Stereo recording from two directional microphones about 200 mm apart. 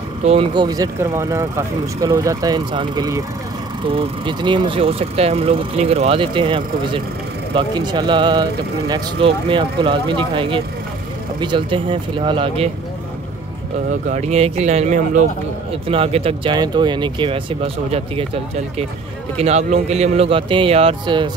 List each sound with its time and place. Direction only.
0.2 s speech: 30° right (ahead or behind)
14.0 s a man's voice: 35° right (ahead or behind)